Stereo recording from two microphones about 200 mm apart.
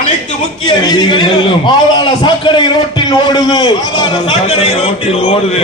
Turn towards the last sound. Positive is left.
turn(degrees=30)  # may be behind; listen again after turning